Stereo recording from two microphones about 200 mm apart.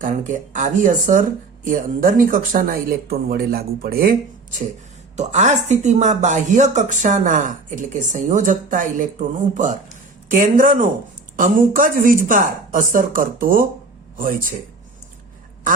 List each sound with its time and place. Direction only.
0.0 s speech: 40° right (ahead or behind)
5.1 s speech: 35° right (ahead or behind)